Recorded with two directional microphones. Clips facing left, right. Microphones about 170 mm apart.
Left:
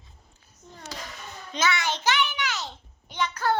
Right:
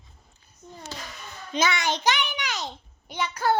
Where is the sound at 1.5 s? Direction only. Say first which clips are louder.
Right 2 dB; 15° right (ahead or behind).